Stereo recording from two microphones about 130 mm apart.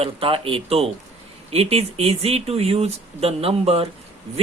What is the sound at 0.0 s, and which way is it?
Speech, 45° right (ahead or behind).